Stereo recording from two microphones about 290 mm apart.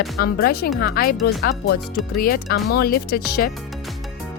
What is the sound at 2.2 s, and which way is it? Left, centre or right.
Speech, left.